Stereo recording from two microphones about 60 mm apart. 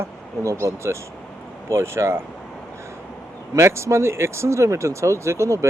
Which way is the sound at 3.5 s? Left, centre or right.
Right.